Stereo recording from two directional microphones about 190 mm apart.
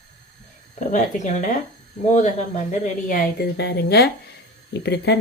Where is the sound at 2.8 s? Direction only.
45° left (ahead or behind).